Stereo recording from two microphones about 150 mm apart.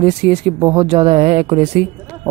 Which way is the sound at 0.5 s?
25° right (ahead or behind).